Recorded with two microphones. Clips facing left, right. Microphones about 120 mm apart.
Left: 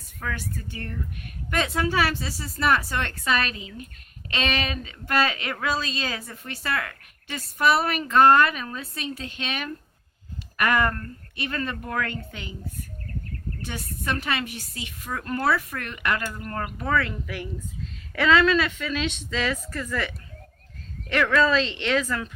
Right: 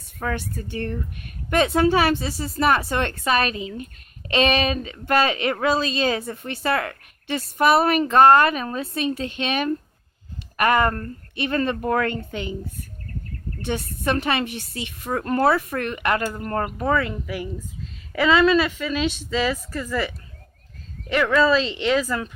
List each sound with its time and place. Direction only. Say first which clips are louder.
0.2 s speech: right 5 dB; 35° right (ahead or behind)
11.8 s speech: right 7 dB; 40° right (ahead or behind)
12.0 s speech: right 8 dB; 25° right (ahead or behind)
13.7 s speech: right 7 dB; 25° right (ahead or behind)
15.1 s speech: right 6 dB; 40° right (ahead or behind)
15.5 s speech: right 5 dB; 25° right (ahead or behind)
16.2 s speech: right 6 dB; 35° right (ahead or behind)
16.9 s a woman's voice: right 1 dB; 15° right (ahead or behind)